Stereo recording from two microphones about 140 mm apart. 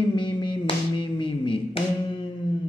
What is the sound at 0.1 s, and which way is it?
Music, 35° left (ahead or behind).